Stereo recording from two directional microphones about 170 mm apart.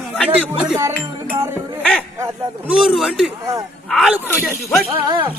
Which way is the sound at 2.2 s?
5° right (ahead or behind).